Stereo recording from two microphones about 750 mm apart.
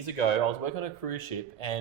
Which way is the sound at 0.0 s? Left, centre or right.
Left.